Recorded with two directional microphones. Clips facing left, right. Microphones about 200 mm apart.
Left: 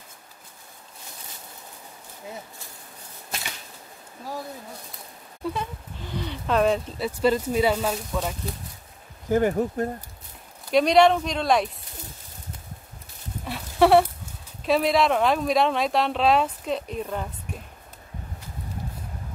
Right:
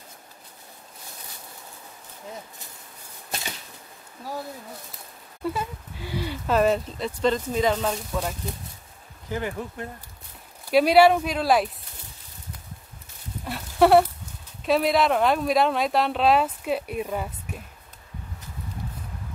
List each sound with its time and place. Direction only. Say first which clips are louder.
5.4 s speech: right 1 dB; 5° right (ahead or behind)
9.3 s speech: left 9 dB; 45° left (ahead or behind)
10.7 s speech: right 1 dB; 5° right (ahead or behind)
13.5 s a sound: even; centre (ahead or behind)
14.6 s speech: even; centre (ahead or behind)